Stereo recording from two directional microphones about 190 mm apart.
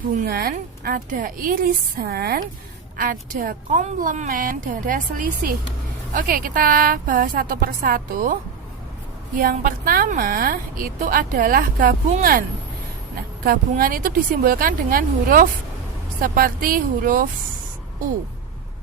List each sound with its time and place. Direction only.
0.1 s a woman's voice: 45° right (ahead or behind)
9.4 s a woman's voice: 50° right (ahead or behind)